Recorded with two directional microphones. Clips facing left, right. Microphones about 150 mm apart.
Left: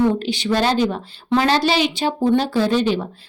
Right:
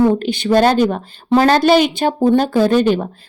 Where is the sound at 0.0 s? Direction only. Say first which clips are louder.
Right 4 dB; 50° right (ahead or behind).